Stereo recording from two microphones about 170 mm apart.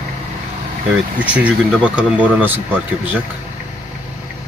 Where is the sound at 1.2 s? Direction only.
10° right (ahead or behind).